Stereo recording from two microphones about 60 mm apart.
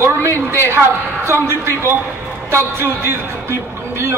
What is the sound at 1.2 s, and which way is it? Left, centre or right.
A man's voice, right.